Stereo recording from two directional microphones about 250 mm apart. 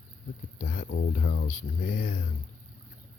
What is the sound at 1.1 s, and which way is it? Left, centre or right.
Speech, left.